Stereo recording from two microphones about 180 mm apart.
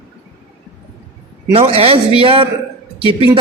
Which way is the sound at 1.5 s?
30° right (ahead or behind).